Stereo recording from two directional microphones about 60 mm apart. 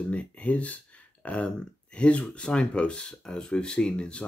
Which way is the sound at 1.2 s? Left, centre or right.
Left.